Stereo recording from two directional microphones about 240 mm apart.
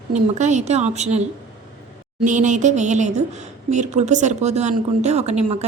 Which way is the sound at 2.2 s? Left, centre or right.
Right.